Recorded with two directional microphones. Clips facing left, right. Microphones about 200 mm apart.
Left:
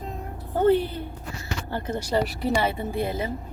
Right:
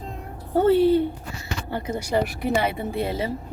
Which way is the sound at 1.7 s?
10° right (ahead or behind).